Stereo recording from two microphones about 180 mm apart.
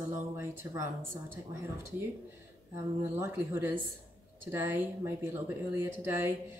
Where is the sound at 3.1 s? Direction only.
15° right (ahead or behind).